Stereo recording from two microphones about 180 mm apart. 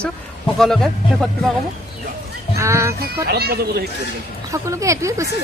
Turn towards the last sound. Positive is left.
turn(degrees=-15)  # may be behind; listen again after turning